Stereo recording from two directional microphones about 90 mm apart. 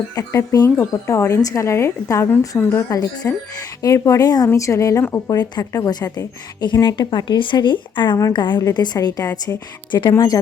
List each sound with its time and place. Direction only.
0.2 s a woman's voice: 40° left (ahead or behind)
2.9 s a woman's voice: 45° left (ahead or behind)
3.8 s a woman's voice: 35° left (ahead or behind)
4.2 s a woman's voice: 50° left (ahead or behind)
4.4 s a woman's voice: 35° left (ahead or behind)
5.7 s a woman's voice: 45° left (ahead or behind)
9.9 s a woman's voice: 60° left (ahead or behind)
10.2 s a woman's voice: 40° left (ahead or behind)